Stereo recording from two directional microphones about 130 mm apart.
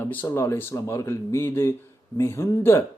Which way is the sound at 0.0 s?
15° left (ahead or behind).